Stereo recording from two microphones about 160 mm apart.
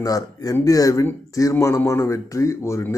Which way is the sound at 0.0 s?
20° left (ahead or behind).